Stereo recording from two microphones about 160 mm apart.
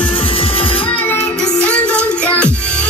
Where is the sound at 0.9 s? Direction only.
10° left (ahead or behind).